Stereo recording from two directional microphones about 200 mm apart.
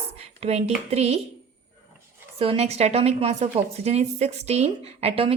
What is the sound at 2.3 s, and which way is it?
A woman's voice, 30° right (ahead or behind).